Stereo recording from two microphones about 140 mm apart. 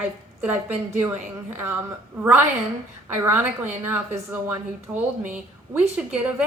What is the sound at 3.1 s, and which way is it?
A woman's voice, 15° right (ahead or behind).